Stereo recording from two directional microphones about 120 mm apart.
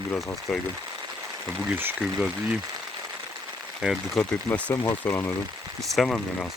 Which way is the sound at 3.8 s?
10° right (ahead or behind).